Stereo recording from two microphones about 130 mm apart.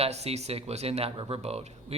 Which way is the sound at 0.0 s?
55° right (ahead or behind).